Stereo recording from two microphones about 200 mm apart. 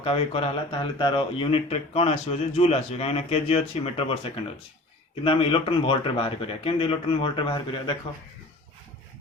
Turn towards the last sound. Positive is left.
turn(degrees=25)  # may be behind; listen again after turning